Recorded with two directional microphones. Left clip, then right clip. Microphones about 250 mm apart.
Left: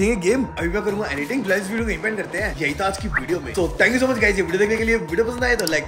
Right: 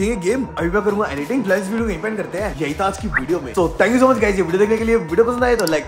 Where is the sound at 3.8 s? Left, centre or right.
Centre.